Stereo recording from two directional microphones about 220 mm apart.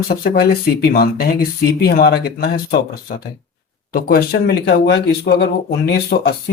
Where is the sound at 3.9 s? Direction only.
40° left (ahead or behind).